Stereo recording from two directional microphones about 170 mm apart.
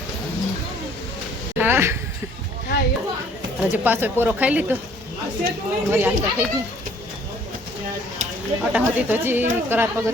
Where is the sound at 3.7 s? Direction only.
10° right (ahead or behind).